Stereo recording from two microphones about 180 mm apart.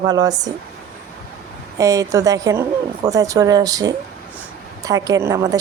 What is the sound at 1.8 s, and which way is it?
A woman's voice, 20° right (ahead or behind).